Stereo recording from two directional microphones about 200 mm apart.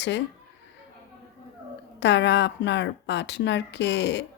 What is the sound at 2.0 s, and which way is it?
A woman's voice, 60° left (ahead or behind).